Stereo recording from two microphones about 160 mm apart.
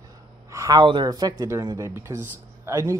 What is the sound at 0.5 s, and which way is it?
Speech, 20° right (ahead or behind).